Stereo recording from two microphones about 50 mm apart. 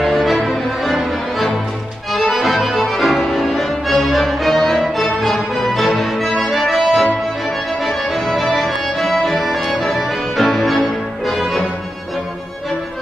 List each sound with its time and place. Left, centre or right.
0.0 s music: centre